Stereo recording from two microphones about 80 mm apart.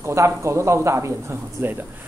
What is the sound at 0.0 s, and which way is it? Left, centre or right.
A woman's voice, right.